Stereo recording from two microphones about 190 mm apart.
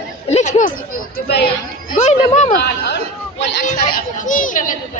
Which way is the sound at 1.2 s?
60° left (ahead or behind).